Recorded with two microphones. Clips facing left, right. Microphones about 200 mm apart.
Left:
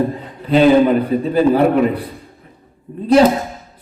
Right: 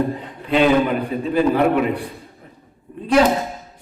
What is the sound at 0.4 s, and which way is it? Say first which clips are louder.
A man's voice: left 5 dB; 35° left (ahead or behind).